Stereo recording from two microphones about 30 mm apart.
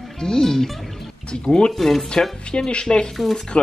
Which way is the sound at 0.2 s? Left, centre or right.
Centre.